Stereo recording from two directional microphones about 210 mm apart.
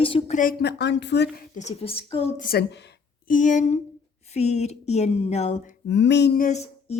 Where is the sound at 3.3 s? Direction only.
35° left (ahead or behind).